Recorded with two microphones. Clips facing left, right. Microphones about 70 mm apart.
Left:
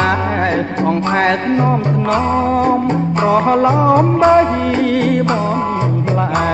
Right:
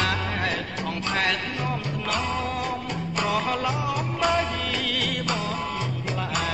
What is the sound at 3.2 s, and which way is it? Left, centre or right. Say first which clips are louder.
Music: left 13 dB; left.